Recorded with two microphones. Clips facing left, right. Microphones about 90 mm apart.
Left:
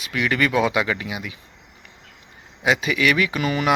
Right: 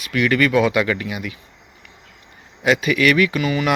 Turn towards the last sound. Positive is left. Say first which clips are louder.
# right 2 dB
turn(degrees=35)  # may be behind; listen again after turning